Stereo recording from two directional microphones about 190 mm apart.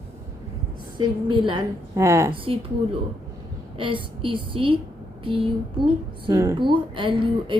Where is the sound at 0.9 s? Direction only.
25° right (ahead or behind).